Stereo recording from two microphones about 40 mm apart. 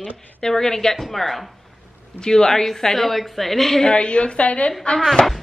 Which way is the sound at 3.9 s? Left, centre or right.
Left.